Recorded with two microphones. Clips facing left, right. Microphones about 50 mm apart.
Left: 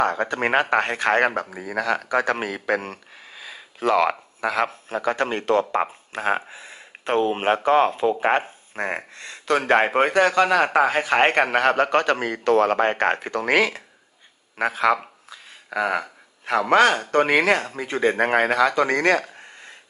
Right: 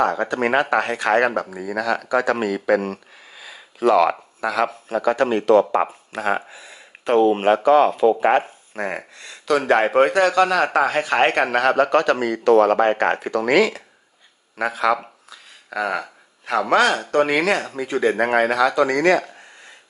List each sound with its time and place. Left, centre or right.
0.0 s a man's voice: left
14.6 s a sound: left
16.4 s a man's voice: left